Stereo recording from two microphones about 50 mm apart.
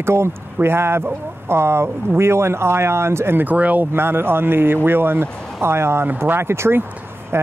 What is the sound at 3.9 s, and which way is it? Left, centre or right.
Speech, right.